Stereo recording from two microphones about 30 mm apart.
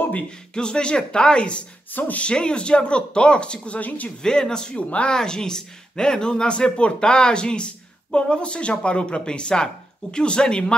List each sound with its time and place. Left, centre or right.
0.6 s speech: left
2.0 s speech: left
2.3 s speech: left
4.2 s speech: left
4.7 s speech: left
5.1 s speech: left